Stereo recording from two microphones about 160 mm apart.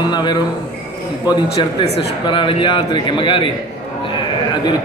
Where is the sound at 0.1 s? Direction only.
25° left (ahead or behind).